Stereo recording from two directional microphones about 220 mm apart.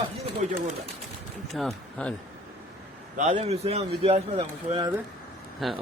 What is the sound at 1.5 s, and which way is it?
Speech, centre (ahead or behind).